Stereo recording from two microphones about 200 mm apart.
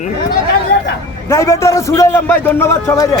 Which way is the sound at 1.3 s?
15° left (ahead or behind).